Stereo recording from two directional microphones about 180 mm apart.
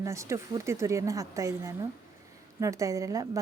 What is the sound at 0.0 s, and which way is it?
A woman's voice, 15° right (ahead or behind).